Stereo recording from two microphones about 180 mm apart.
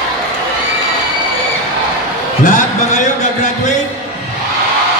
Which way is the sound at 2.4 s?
40° left (ahead or behind).